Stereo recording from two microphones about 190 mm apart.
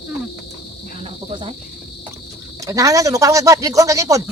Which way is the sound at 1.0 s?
30° right (ahead or behind).